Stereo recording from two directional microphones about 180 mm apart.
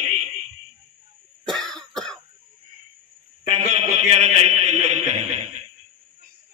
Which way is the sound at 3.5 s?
40° right (ahead or behind).